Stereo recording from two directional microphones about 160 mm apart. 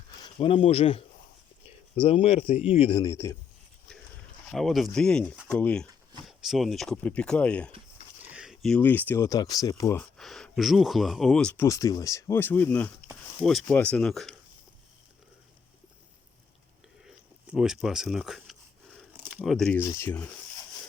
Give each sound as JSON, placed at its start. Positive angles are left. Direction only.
{"t": 0.2, "sound": "speech", "side_deg": 35}
{"t": 3.0, "sound": "speech", "side_deg": 20}
{"t": 4.4, "sound": "speech", "side_deg": 0}
{"t": 8.2, "sound": "speech", "side_deg": -5}
{"t": 10.0, "sound": "speech", "side_deg": 0}
{"t": 11.6, "sound": "speech", "side_deg": 20}
{"t": 17.4, "sound": "speech", "side_deg": -5}
{"t": 18.9, "sound": "a sound", "side_deg": 0}
{"t": 19.4, "sound": "speech", "side_deg": 0}
{"t": 20.0, "sound": "speech", "side_deg": 15}